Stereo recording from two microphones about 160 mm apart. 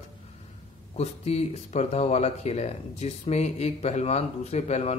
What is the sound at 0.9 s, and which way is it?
A man's voice, 40° left (ahead or behind).